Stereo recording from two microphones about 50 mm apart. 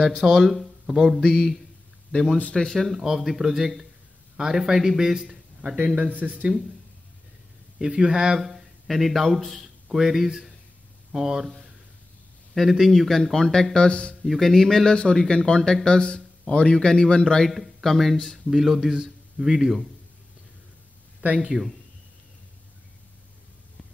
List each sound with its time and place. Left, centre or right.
0.2 s speech: centre
2.4 s speech: centre
3.0 s a man's voice: centre
5.9 s speech: right
7.8 s a man's voice: centre
12.5 s speech: centre
14.2 s speech: centre
17.5 s speech: centre
21.4 s a man's voice: centre